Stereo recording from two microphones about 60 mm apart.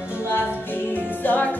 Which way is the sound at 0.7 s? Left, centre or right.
Left.